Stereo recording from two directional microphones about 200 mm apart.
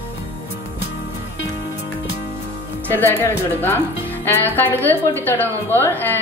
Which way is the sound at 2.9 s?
10° left (ahead or behind).